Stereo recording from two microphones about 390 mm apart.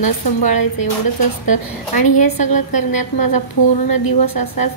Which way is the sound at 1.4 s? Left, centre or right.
Left.